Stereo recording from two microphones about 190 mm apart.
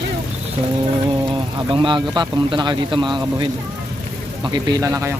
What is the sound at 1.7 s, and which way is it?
Speech, 25° right (ahead or behind).